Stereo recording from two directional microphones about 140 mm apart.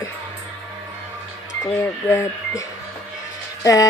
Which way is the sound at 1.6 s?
20° left (ahead or behind).